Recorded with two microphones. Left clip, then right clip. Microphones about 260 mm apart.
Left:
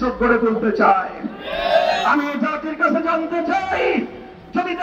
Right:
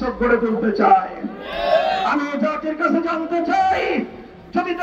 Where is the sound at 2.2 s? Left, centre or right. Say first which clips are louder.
Even; right.